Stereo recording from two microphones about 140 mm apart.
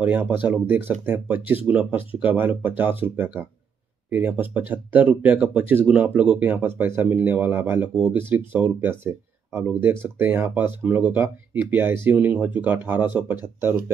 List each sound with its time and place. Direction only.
0.0 s speech: 10° right (ahead or behind)
4.1 s speech: 15° right (ahead or behind)